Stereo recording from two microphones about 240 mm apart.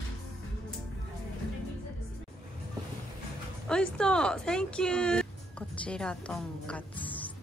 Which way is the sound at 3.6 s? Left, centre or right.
Centre.